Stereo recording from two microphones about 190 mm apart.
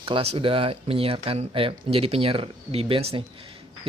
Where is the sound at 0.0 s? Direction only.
30° right (ahead or behind).